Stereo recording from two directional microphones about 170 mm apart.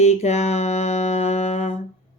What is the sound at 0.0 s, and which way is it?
Mantra, 40° left (ahead or behind).